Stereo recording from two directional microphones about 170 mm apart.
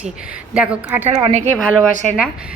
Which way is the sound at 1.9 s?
45° right (ahead or behind).